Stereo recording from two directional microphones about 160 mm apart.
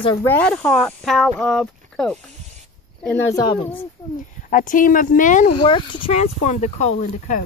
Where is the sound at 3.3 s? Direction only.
25° left (ahead or behind).